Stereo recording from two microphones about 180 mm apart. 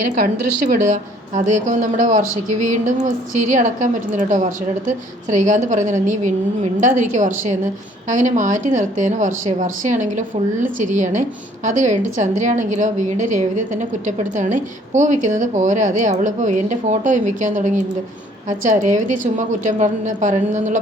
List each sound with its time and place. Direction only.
0.0 s a woman's voice: 50° right (ahead or behind)